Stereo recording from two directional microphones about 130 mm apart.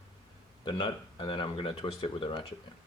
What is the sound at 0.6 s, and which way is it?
Speech, 35° left (ahead or behind).